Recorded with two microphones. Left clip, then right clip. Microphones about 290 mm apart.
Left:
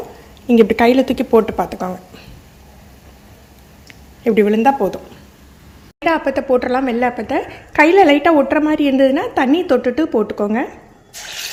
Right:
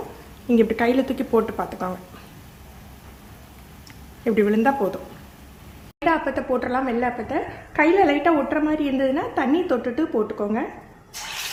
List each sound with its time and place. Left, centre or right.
0.4 s a woman's voice: left
4.2 s speech: centre
6.1 s a woman's voice: left